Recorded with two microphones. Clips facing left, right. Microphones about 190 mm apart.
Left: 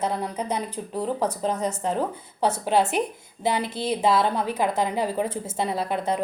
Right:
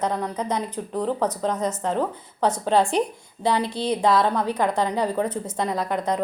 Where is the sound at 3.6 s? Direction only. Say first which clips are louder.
Right 2 dB; 20° right (ahead or behind).